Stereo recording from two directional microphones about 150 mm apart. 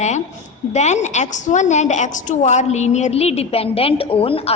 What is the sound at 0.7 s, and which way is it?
A woman's voice, 50° left (ahead or behind).